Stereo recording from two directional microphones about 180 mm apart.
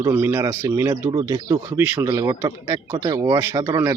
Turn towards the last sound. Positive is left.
turn(degrees=-20)  # may be behind; listen again after turning